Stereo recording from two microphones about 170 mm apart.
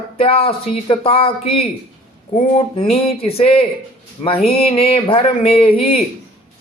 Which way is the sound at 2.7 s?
35° left (ahead or behind).